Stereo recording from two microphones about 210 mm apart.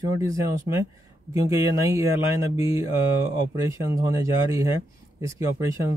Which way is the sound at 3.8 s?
15° right (ahead or behind).